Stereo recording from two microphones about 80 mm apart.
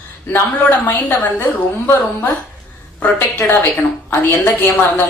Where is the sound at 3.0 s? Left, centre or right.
Left.